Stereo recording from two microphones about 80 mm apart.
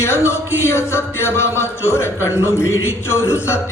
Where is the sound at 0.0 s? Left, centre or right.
Left.